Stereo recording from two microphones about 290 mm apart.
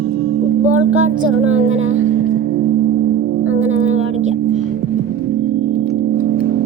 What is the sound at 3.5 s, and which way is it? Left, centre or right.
Music, right.